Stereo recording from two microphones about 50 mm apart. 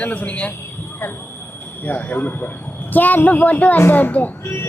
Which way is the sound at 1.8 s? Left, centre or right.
Left.